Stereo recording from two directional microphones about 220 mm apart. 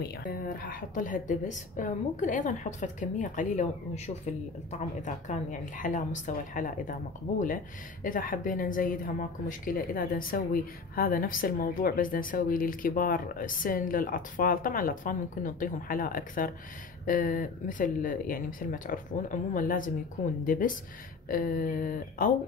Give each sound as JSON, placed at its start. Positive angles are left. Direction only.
{"t": 0.0, "sound": "speech", "side_deg": 40}